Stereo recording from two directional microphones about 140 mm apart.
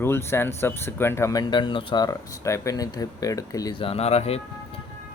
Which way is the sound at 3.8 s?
45° left (ahead or behind).